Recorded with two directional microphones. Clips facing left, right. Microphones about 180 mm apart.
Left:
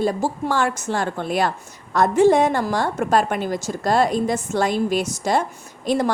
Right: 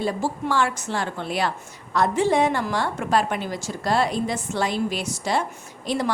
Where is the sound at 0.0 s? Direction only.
45° left (ahead or behind).